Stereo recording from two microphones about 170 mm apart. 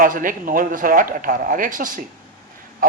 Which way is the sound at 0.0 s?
55° right (ahead or behind).